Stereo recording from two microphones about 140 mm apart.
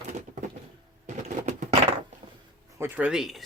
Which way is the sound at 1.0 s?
60° right (ahead or behind).